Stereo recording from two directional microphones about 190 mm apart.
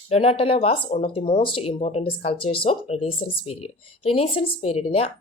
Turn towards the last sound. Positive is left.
turn(degrees=30)  # may be behind; listen again after turning